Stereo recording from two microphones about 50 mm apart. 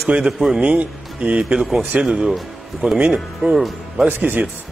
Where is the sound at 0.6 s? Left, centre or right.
Right.